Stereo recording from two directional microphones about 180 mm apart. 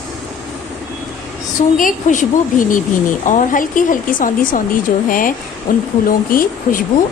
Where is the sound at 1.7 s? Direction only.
45° left (ahead or behind).